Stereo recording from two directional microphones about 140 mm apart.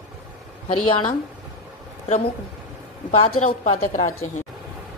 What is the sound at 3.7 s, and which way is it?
Speech, 65° left (ahead or behind).